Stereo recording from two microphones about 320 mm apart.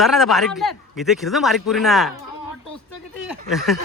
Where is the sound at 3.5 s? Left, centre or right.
Centre.